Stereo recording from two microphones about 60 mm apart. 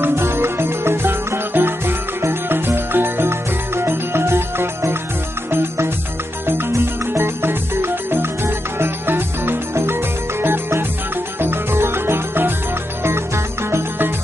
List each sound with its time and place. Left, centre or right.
0.0 s music: right
13.7 s music: right